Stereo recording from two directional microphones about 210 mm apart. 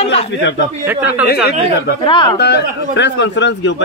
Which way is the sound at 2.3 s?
50° left (ahead or behind).